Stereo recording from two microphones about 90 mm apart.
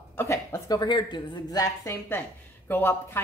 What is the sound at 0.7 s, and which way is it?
Speech, 50° left (ahead or behind).